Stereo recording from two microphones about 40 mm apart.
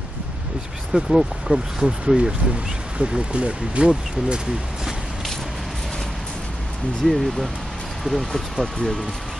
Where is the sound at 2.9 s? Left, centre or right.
Right.